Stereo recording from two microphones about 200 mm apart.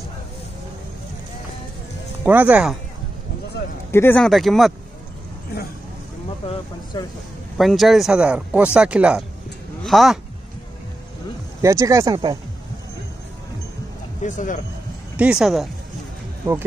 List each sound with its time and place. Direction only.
2.2 s speech: 10° right (ahead or behind)
3.9 s speech: 10° left (ahead or behind)
6.4 s speech: 30° left (ahead or behind)
7.5 s speech: centre (ahead or behind)
11.6 s speech: 15° right (ahead or behind)
14.2 s speech: 40° left (ahead or behind)
15.1 s speech: 5° right (ahead or behind)
16.5 s speech: 15° right (ahead or behind)